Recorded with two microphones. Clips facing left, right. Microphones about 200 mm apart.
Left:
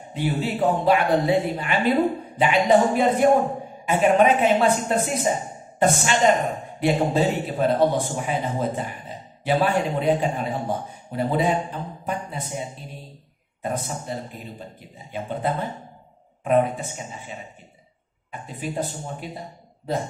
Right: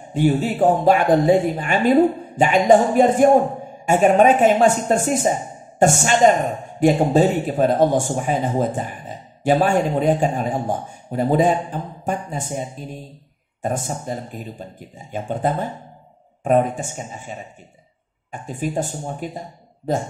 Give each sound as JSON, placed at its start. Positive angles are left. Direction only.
{"t": 0.1, "sound": "a man's voice", "side_deg": -45}
{"t": 18.3, "sound": "a man's voice", "side_deg": -45}